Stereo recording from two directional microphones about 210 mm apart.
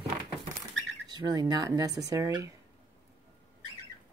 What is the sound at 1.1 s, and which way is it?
Speech, 20° right (ahead or behind).